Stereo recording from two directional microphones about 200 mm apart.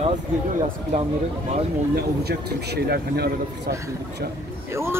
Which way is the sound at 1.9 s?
50° right (ahead or behind).